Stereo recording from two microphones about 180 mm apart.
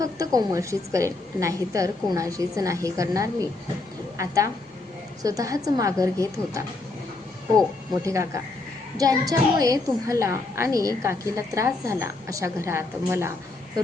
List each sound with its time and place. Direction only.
0.0 s a woman's voice: 20° right (ahead or behind)
8.0 s a woman's voice: 15° right (ahead or behind)